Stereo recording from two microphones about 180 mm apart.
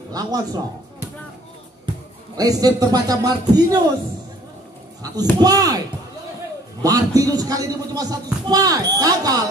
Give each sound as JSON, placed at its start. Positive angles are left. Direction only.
{"t": 0.1, "sound": "speech", "side_deg": -20}
{"t": 2.3, "sound": "a man's voice", "side_deg": -20}
{"t": 5.4, "sound": "a man's voice", "side_deg": -20}